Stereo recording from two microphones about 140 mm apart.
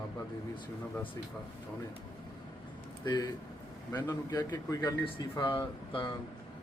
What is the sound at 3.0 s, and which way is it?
Speech, 30° left (ahead or behind).